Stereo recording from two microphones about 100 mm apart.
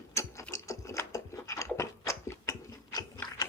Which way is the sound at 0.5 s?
30° left (ahead or behind).